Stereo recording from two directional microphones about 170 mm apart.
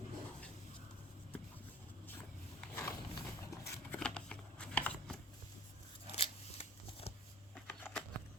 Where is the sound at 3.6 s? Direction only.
15° left (ahead or behind).